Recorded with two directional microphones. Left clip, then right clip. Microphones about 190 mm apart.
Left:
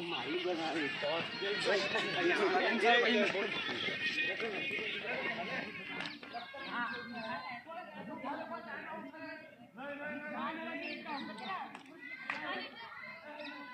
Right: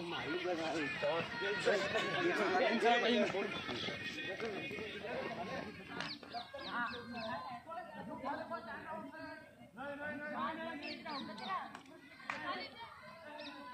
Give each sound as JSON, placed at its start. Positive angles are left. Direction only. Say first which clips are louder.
{"t": 0.1, "sound": "speech", "louder": "left 2 dB", "side_deg": -25}
{"t": 4.0, "sound": "speech", "louder": "left 7 dB", "side_deg": -60}
{"t": 10.0, "sound": "a man's voice", "louder": "even", "side_deg": -25}